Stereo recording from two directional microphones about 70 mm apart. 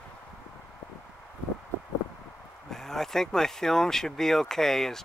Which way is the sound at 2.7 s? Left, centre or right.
Centre.